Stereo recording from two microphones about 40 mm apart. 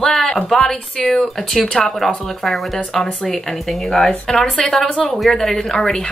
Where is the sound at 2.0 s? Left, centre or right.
Centre.